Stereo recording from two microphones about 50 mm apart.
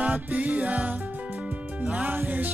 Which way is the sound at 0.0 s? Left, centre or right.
Right.